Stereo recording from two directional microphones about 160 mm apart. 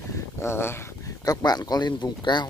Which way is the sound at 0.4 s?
15° left (ahead or behind).